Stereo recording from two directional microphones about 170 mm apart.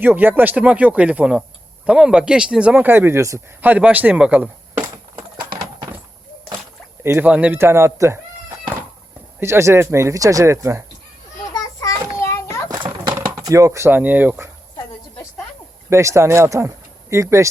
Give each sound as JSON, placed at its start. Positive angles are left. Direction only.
{"t": 0.0, "sound": "speech", "side_deg": -10}
{"t": 7.0, "sound": "speech", "side_deg": -15}
{"t": 9.4, "sound": "speech", "side_deg": -15}
{"t": 11.5, "sound": "a sound", "side_deg": 20}
{"t": 12.7, "sound": "a sound", "side_deg": -25}
{"t": 13.1, "sound": "speech", "side_deg": -20}
{"t": 15.9, "sound": "speech", "side_deg": -15}